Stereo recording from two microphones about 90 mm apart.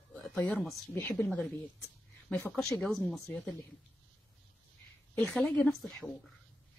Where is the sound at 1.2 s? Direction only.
20° left (ahead or behind).